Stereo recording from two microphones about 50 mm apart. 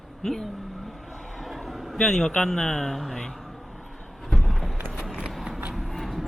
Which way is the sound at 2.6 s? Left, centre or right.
Centre.